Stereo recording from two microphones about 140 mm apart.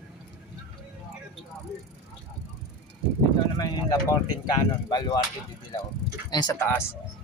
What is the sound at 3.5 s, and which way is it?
Speech, 25° left (ahead or behind).